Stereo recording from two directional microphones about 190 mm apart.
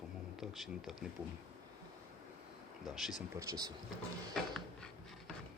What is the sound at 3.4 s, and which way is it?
Speech, 20° right (ahead or behind).